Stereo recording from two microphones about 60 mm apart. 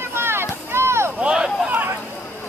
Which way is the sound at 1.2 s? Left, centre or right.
Centre.